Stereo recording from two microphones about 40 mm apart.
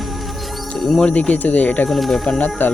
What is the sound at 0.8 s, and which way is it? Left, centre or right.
Music, centre.